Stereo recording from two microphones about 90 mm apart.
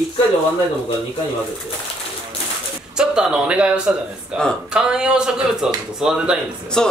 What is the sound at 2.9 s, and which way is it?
A man's voice, 10° right (ahead or behind).